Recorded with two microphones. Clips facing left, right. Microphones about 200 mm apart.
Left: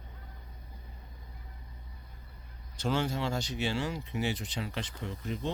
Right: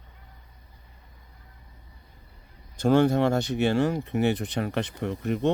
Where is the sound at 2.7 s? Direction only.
55° right (ahead or behind).